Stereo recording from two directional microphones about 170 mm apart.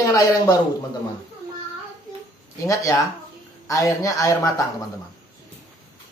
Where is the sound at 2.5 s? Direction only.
20° left (ahead or behind).